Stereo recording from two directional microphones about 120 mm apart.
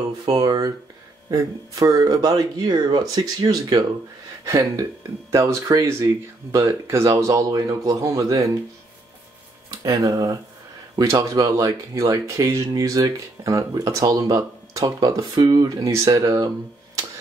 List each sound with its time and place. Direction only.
0.2 s speech: 35° right (ahead or behind)
9.8 s speech: 25° right (ahead or behind)